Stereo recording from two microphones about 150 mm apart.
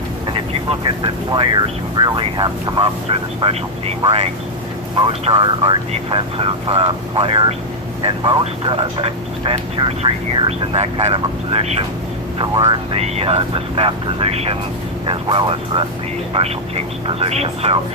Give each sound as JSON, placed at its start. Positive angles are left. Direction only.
{"t": 0.7, "sound": "speech", "side_deg": -35}
{"t": 12.4, "sound": "speech", "side_deg": -30}